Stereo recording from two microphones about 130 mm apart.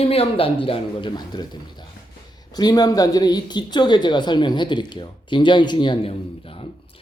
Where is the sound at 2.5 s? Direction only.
30° left (ahead or behind).